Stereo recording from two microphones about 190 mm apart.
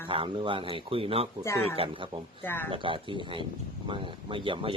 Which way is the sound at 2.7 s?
25° right (ahead or behind).